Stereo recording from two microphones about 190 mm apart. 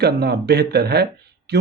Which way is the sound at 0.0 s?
60° right (ahead or behind).